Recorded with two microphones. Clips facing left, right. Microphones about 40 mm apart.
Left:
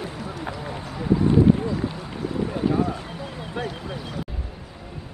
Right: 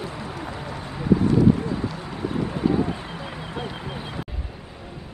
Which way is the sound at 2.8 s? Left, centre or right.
Right.